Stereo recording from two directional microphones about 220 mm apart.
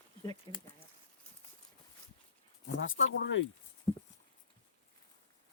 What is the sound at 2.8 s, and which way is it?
Speech, 60° left (ahead or behind).